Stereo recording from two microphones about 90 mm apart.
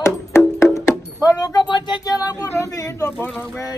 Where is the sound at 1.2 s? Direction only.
45° left (ahead or behind).